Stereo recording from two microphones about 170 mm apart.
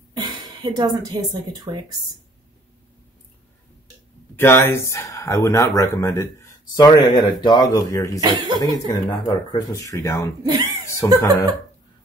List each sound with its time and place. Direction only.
0.1 s speech: 25° right (ahead or behind)
4.4 s speech: 15° left (ahead or behind)
10.4 s speech: 20° right (ahead or behind)
11.0 s speech: 15° left (ahead or behind)